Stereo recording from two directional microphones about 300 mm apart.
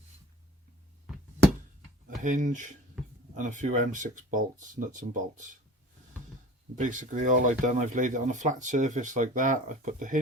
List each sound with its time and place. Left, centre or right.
2.0 s speech: right
6.7 s speech: right